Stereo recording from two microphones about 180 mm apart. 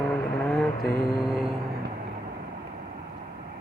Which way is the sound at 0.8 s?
55° left (ahead or behind).